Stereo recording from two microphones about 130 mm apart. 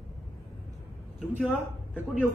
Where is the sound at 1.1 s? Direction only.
5° right (ahead or behind).